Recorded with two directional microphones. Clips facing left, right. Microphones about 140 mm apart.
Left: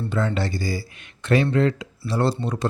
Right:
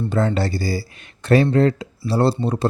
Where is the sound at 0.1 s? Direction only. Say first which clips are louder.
Right 4 dB; 40° right (ahead or behind).